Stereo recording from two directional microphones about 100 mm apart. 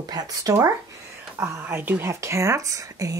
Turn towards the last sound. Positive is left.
turn(degrees=-35)  # may be behind; listen again after turning